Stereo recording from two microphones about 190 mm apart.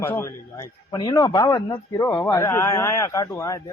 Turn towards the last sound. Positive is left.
turn(degrees=15)  # may be behind; listen again after turning